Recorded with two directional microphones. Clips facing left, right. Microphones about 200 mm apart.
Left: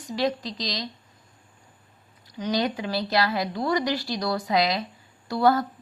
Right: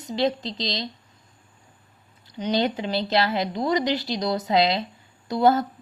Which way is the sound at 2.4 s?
25° right (ahead or behind).